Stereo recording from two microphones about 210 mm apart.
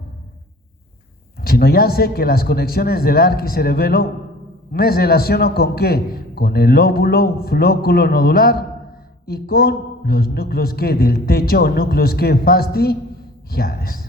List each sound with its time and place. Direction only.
1.4 s a man's voice: 45° left (ahead or behind)